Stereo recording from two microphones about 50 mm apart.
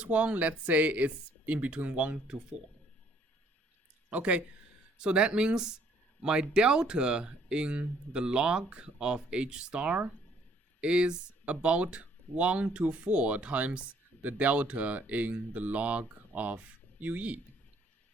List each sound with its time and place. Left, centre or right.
0.0 s speech: right
2.2 s speech: centre
4.1 s speech: right